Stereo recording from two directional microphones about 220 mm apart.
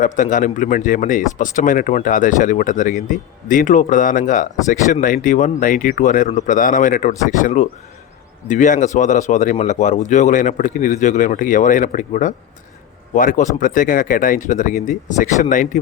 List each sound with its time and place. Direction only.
0.0 s speech: 35° left (ahead or behind)